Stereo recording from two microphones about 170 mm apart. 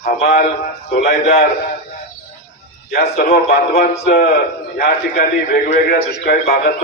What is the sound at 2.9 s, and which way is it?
A man's voice, 65° left (ahead or behind).